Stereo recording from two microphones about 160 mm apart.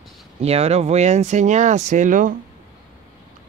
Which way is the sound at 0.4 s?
40° right (ahead or behind).